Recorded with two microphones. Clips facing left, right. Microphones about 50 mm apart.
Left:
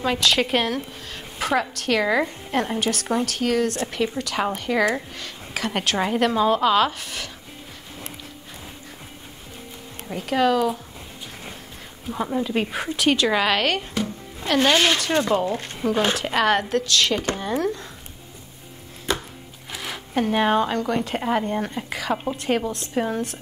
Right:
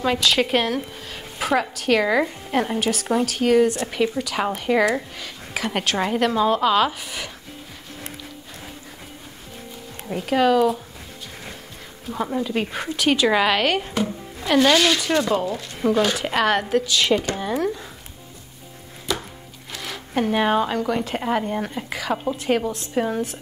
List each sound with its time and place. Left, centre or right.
0.0 s a woman's voice: centre
10.0 s a woman's voice: centre
12.1 s a woman's voice: centre
15.1 s speech: left
16.2 s a woman's voice: centre
19.7 s a woman's voice: centre